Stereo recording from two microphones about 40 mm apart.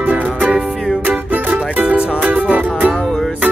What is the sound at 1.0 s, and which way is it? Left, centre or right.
Music, right.